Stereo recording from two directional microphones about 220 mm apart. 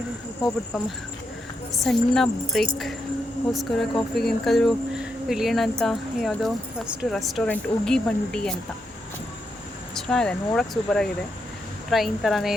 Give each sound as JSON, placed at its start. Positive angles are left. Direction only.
{"t": 1.8, "sound": "speech", "side_deg": 0}
{"t": 9.9, "sound": "speech", "side_deg": 5}